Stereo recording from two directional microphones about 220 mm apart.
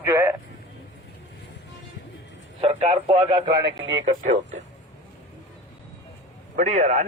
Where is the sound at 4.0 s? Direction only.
30° right (ahead or behind).